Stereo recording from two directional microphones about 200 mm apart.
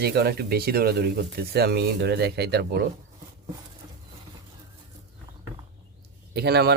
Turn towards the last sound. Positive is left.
turn(degrees=-55)  # may be behind; listen again after turning